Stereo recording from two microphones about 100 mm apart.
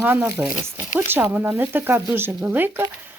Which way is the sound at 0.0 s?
15° right (ahead or behind).